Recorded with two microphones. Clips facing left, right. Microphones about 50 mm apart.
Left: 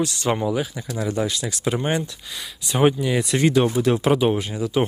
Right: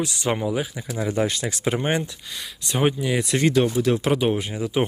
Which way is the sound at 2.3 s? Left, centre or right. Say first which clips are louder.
Left 3 dB; centre.